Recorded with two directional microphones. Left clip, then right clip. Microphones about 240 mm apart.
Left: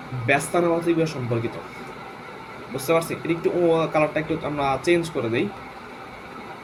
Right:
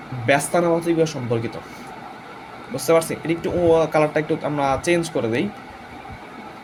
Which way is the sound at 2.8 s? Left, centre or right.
Right.